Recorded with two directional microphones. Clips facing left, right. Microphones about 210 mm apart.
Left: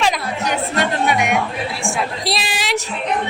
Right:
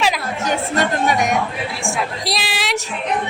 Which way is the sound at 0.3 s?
45° right (ahead or behind).